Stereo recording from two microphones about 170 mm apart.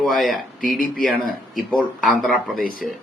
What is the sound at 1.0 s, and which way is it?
Speech, centre (ahead or behind).